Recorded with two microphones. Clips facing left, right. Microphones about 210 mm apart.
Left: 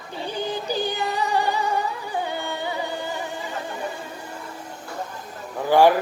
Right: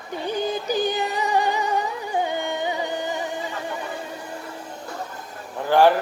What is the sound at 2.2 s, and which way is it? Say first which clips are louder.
Music: right 3 dB; 15° right (ahead or behind).